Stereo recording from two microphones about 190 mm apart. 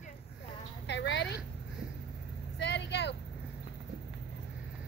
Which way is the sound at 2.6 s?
65° left (ahead or behind).